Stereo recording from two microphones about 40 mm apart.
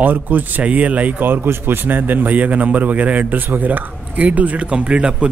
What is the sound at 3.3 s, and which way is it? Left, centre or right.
A man's voice, right.